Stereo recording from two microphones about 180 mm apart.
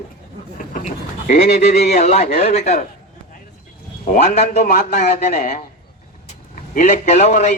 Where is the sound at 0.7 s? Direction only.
45° left (ahead or behind).